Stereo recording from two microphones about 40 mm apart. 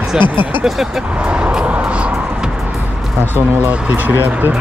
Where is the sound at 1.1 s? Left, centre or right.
Right.